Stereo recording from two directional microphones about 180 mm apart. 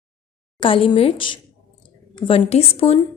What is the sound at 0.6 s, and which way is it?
A woman's voice, 30° left (ahead or behind).